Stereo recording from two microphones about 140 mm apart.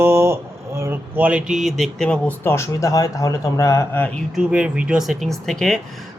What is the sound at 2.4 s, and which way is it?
Speech, 20° left (ahead or behind).